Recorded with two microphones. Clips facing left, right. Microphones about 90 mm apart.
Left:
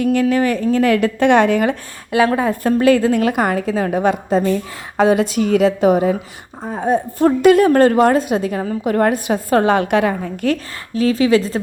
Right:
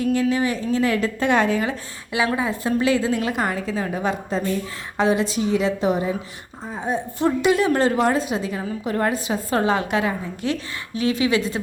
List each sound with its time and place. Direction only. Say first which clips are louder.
0.0 s a woman's voice: left 5 dB; 65° left (ahead or behind)
2.1 s a woman's voice: left 7 dB; 50° left (ahead or behind)
6.7 s a woman's voice: left 8 dB; 45° left (ahead or behind)
10.9 s a woman's voice: left 6 dB; 35° left (ahead or behind)